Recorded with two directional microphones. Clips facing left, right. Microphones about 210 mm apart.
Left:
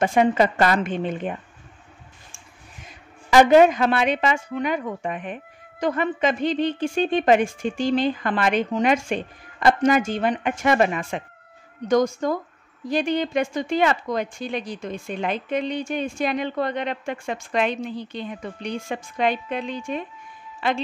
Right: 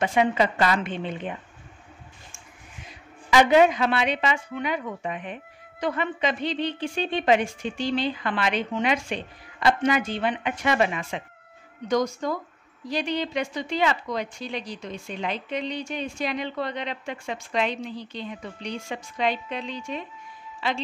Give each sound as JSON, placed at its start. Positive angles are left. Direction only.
{"t": 0.0, "sound": "a woman's voice", "side_deg": 45}
{"t": 3.3, "sound": "a woman's voice", "side_deg": 45}